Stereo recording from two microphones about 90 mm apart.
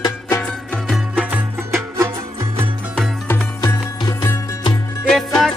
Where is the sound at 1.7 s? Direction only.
30° right (ahead or behind).